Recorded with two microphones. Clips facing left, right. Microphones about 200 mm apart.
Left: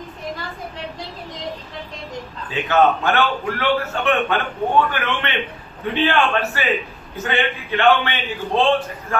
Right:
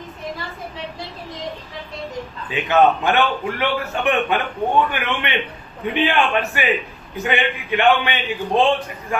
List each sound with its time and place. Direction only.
2.5 s a man's voice: 15° right (ahead or behind)